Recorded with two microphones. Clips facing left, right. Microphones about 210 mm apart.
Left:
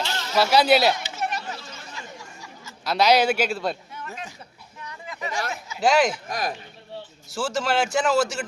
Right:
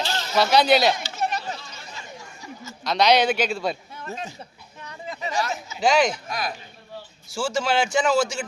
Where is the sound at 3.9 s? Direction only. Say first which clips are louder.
Right 3 dB; 25° right (ahead or behind).